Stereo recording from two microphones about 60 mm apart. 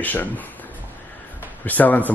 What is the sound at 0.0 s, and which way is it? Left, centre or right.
Speech, left.